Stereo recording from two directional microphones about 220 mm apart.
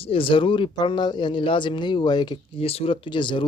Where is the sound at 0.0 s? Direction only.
25° left (ahead or behind).